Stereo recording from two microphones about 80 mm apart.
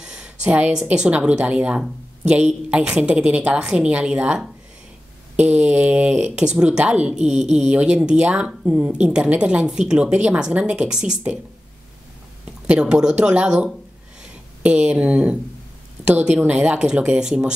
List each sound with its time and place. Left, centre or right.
0.0 s a sound: centre
0.8 s speech: centre
12.6 s speech: centre